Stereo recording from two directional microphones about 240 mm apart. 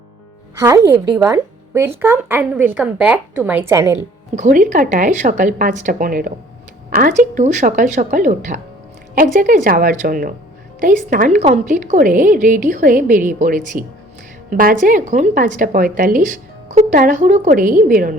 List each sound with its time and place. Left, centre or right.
0.6 s a woman's voice: centre
4.4 s speech: right